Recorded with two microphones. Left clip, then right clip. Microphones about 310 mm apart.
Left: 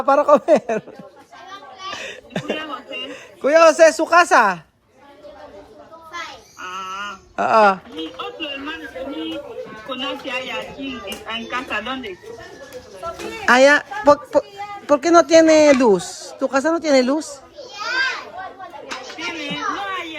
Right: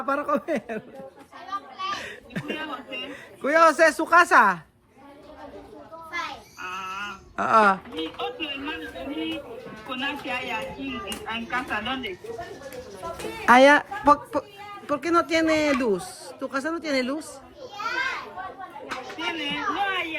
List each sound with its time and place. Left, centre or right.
0.0 s a man's voice: centre
2.0 s chuckle: centre
3.1 s speech: centre
6.6 s a sound: centre
10.0 s speech: right
11.5 s a man's voice: centre
13.4 s a man's voice: centre
19.4 s a sound: centre